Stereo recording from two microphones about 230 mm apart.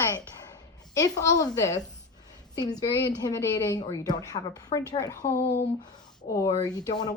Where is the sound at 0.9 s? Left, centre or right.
Centre.